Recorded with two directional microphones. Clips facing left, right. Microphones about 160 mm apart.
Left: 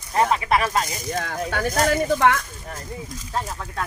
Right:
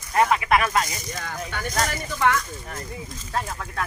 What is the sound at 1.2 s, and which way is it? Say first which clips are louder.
Speech: left 4 dB; 75° left (ahead or behind).